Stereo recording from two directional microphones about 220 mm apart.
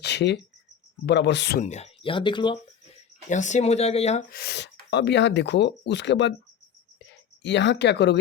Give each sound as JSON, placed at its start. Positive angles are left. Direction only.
{"t": 0.0, "sound": "a sound", "side_deg": 50}
{"t": 1.0, "sound": "speech", "side_deg": 50}
{"t": 1.6, "sound": "speech", "side_deg": 30}
{"t": 3.2, "sound": "speech", "side_deg": 35}
{"t": 4.3, "sound": "speech", "side_deg": 45}
{"t": 7.4, "sound": "speech", "side_deg": 55}